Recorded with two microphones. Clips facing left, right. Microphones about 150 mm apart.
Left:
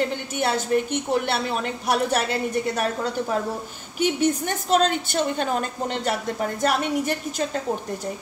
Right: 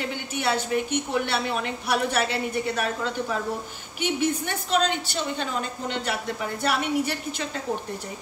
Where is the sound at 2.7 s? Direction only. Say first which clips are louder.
Left 2 dB; 40° left (ahead or behind).